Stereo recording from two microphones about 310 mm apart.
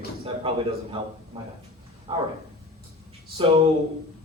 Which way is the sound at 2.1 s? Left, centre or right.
Centre.